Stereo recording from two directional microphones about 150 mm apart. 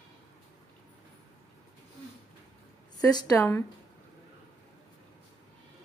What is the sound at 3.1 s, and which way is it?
Speech, 20° left (ahead or behind).